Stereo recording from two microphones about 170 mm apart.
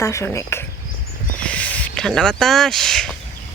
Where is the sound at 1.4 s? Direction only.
5° left (ahead or behind).